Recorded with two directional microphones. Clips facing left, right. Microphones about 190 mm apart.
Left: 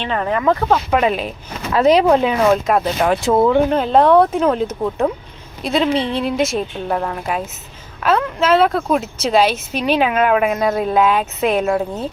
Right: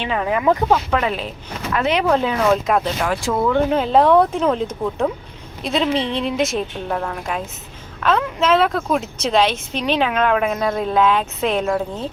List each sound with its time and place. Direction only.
0.0 s speech: 5° right (ahead or behind)
0.9 s speech: 15° left (ahead or behind)
1.7 s speech: 35° left (ahead or behind)
2.0 s speech: 15° left (ahead or behind)
2.5 s a woman's voice: 5° left (ahead or behind)
3.0 s speech: 25° left (ahead or behind)
3.7 s a woman's voice: centre (ahead or behind)